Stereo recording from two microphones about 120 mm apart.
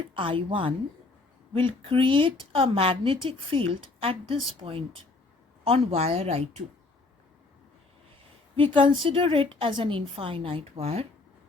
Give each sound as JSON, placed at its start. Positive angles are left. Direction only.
{"t": 0.1, "sound": "a woman's voice", "side_deg": -45}
{"t": 5.6, "sound": "a woman's voice", "side_deg": -50}
{"t": 8.5, "sound": "a woman's voice", "side_deg": -45}